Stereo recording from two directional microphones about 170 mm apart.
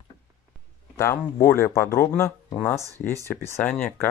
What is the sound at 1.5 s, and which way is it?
Speech, 15° left (ahead or behind).